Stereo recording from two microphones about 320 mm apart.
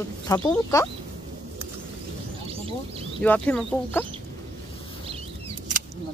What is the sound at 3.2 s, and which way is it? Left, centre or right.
Speech, centre.